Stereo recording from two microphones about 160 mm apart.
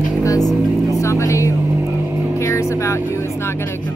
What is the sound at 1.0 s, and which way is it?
Music, 20° left (ahead or behind).